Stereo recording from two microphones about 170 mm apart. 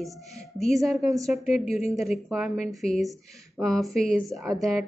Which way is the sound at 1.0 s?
20° right (ahead or behind).